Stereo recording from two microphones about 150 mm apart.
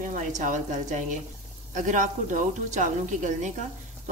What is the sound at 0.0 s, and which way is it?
Speech, 60° right (ahead or behind).